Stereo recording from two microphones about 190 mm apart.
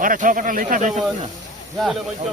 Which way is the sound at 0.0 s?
45° right (ahead or behind).